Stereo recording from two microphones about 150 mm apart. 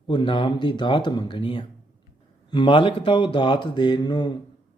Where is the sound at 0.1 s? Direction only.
30° left (ahead or behind).